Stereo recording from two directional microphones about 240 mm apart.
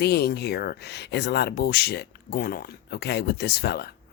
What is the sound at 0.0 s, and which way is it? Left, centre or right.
Speech, left.